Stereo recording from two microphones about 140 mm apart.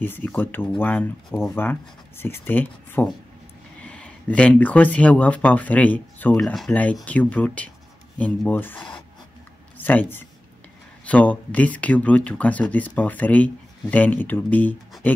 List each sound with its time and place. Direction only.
0.0 s speech: 15° left (ahead or behind)
8.7 s speech: 35° left (ahead or behind)
9.8 s speech: 15° left (ahead or behind)